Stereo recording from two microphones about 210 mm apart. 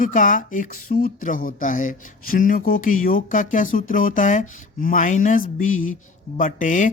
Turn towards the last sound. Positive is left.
turn(degrees=35)  # may be behind; listen again after turning